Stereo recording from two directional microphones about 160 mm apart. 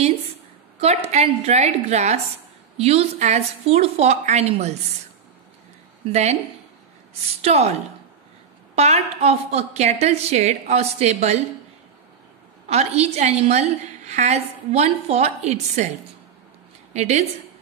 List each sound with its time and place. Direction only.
0.7 s a woman's voice: 40° right (ahead or behind)
7.4 s a woman's voice: 40° right (ahead or behind)
8.7 s a woman's voice: 40° right (ahead or behind)
12.6 s a woman's voice: 40° right (ahead or behind)
16.9 s a woman's voice: 45° right (ahead or behind)